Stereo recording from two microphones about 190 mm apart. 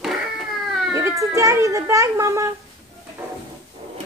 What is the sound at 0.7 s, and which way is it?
Baby cry, centre (ahead or behind).